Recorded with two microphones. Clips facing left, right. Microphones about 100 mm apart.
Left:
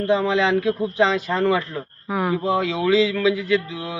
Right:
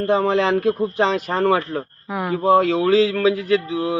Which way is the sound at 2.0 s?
Centre (ahead or behind).